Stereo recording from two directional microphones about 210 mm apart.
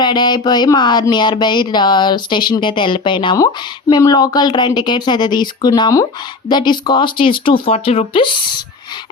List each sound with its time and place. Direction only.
0.0 s speech: 20° left (ahead or behind)